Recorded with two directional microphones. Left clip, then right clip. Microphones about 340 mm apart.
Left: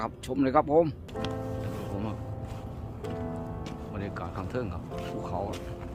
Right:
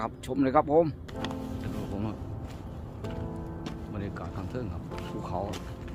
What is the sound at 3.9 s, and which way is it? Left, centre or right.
Speech, centre.